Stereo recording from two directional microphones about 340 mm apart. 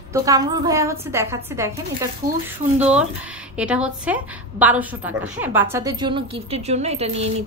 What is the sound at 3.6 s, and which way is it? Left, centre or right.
A woman's voice, centre.